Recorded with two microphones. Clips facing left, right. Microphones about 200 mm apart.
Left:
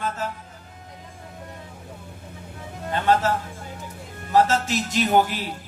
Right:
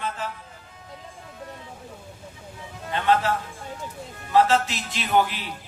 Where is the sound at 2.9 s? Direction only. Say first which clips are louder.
Left 1 dB; 45° left (ahead or behind).